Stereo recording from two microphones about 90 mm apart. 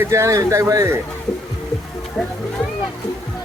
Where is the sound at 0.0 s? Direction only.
30° right (ahead or behind).